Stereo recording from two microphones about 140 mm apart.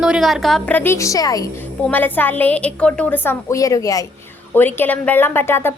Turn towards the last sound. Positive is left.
turn(degrees=15)  # may be behind; listen again after turning